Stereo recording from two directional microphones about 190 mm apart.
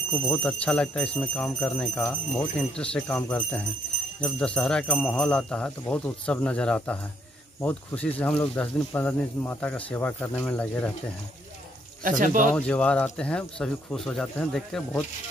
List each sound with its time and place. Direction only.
0.1 s speech: 10° left (ahead or behind)
12.0 s speech: 45° right (ahead or behind)
12.5 s speech: 5° left (ahead or behind)